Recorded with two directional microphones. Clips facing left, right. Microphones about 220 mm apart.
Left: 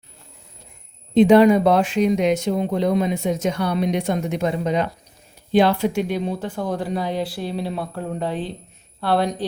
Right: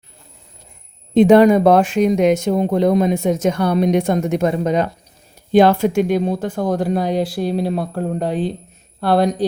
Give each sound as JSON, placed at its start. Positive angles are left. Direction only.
{"t": 1.1, "sound": "speech", "side_deg": -50}